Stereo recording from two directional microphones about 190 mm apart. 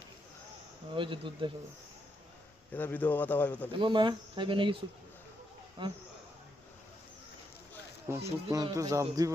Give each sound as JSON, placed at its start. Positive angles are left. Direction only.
{"t": 0.9, "sound": "speech", "side_deg": -25}
{"t": 2.7, "sound": "speech", "side_deg": 10}
{"t": 3.7, "sound": "speech", "side_deg": -25}
{"t": 5.8, "sound": "speech", "side_deg": -25}
{"t": 8.1, "sound": "a man's voice", "side_deg": -15}